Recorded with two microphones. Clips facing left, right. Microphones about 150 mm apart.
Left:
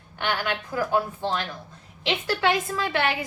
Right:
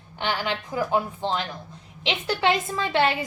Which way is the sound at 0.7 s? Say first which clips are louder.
Even; 20° right (ahead or behind).